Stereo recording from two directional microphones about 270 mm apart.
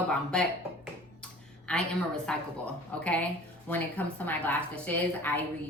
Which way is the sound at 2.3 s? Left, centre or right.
Centre.